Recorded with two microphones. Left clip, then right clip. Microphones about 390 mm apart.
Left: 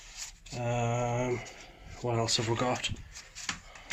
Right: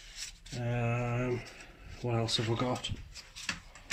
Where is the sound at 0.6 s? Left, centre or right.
Left.